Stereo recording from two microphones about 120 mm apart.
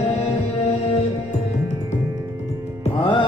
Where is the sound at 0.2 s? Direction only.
60° left (ahead or behind).